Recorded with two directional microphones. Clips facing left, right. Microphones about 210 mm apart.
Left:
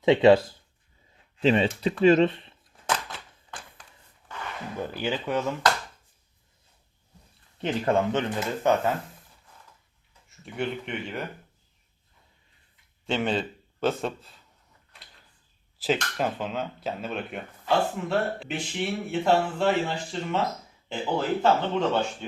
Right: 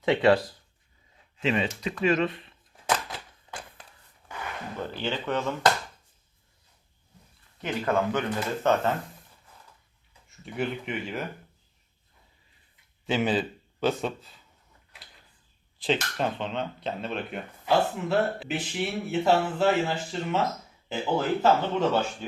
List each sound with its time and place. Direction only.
0.0 s speech: 20° left (ahead or behind)
4.3 s a sound: 10° right (ahead or behind)
4.8 s speech: 10° left (ahead or behind)
7.6 s speech: 30° left (ahead or behind)
8.7 s speech: 15° left (ahead or behind)
10.2 s speech: centre (ahead or behind)
13.1 s a man's voice: 5° right (ahead or behind)
15.8 s speech: 5° left (ahead or behind)